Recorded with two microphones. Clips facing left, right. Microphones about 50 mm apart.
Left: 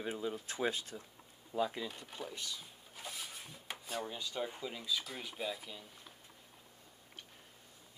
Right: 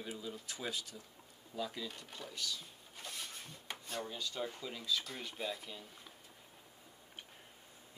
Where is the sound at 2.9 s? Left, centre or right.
Centre.